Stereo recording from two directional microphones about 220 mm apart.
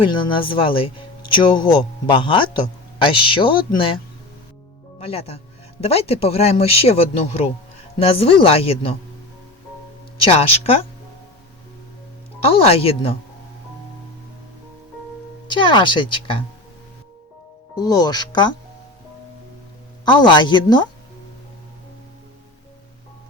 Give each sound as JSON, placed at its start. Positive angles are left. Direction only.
{"t": 0.0, "sound": "speech", "side_deg": 25}
{"t": 4.9, "sound": "speech", "side_deg": 25}
{"t": 10.2, "sound": "speech", "side_deg": 25}
{"t": 12.4, "sound": "speech", "side_deg": 25}
{"t": 15.4, "sound": "speech", "side_deg": 20}
{"t": 17.7, "sound": "speech", "side_deg": 15}
{"t": 20.1, "sound": "speech", "side_deg": 20}